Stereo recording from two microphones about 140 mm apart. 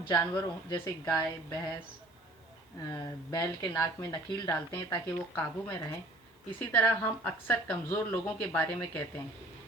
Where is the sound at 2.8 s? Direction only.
25° left (ahead or behind).